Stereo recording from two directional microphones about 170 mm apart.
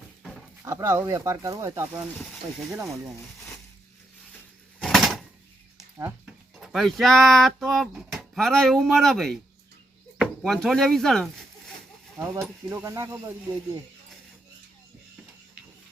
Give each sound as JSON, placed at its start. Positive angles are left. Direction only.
{"t": 0.2, "sound": "a sound", "side_deg": 5}
{"t": 0.6, "sound": "speech", "side_deg": -15}
{"t": 2.1, "sound": "speech", "side_deg": 0}
{"t": 2.8, "sound": "speech", "side_deg": -20}
{"t": 4.8, "sound": "a sound", "side_deg": 0}
{"t": 6.2, "sound": "speech", "side_deg": -5}
{"t": 12.2, "sound": "speech", "side_deg": -20}